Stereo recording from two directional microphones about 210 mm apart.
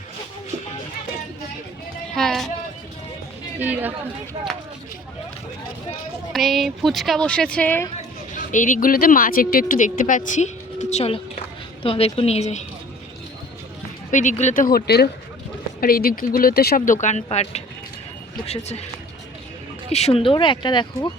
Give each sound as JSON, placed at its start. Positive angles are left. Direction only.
{"t": 2.1, "sound": "speech", "side_deg": 0}
{"t": 3.6, "sound": "speech", "side_deg": -10}
{"t": 6.3, "sound": "speech", "side_deg": 0}
{"t": 7.9, "sound": "speech", "side_deg": 40}
{"t": 14.1, "sound": "speech", "side_deg": 35}
{"t": 19.9, "sound": "speech", "side_deg": 30}